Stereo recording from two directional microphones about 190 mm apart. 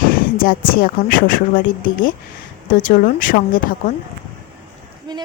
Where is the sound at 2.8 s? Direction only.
45° left (ahead or behind).